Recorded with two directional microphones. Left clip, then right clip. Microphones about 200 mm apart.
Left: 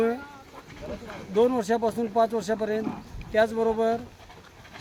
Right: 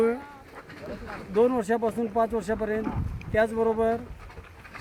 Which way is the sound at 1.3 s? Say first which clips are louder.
Even; centre (ahead or behind).